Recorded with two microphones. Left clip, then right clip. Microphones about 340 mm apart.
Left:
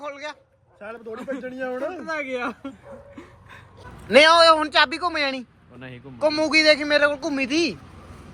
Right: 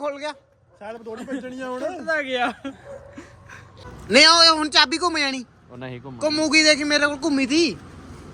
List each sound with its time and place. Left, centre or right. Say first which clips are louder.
0.0 s a sound: right 5 dB; centre
0.8 s speech: right 1 dB; centre
4.4 s a man's voice: even; centre